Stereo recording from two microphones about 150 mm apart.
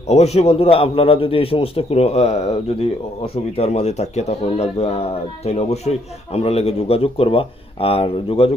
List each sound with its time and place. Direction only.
0.1 s a man's voice: 45° left (ahead or behind)
3.6 s a man's voice: 50° left (ahead or behind)